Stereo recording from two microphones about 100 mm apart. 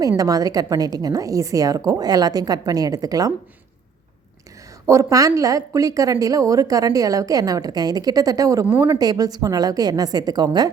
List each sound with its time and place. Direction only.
0.2 s a woman's voice: 40° right (ahead or behind)
4.9 s a woman's voice: 30° right (ahead or behind)